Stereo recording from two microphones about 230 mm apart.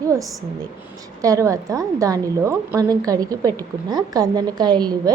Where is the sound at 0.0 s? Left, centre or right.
Centre.